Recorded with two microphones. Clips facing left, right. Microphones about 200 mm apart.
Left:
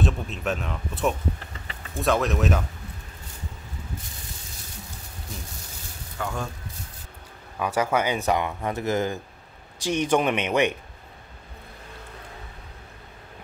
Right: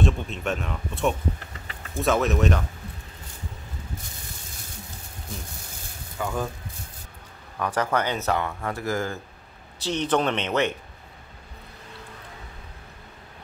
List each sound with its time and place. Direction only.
0.0 s speech: centre (ahead or behind)
6.1 s speech: 5° right (ahead or behind)
7.5 s speech: 10° left (ahead or behind)